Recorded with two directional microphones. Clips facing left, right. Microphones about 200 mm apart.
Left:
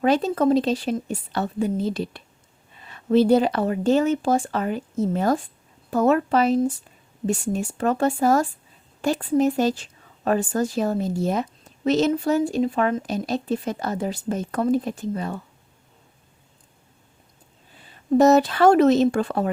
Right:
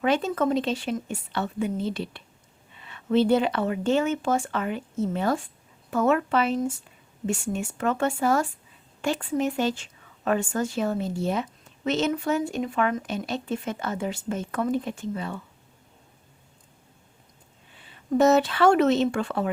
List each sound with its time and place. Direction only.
0.0 s a woman's voice: 35° left (ahead or behind)
17.7 s speech: 40° left (ahead or behind)